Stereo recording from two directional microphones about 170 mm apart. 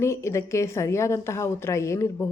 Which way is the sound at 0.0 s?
15° left (ahead or behind).